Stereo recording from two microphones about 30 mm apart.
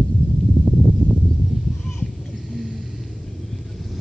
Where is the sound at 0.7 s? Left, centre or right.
Left.